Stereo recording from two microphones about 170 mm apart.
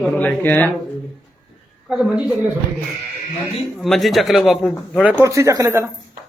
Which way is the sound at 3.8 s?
Centre (ahead or behind).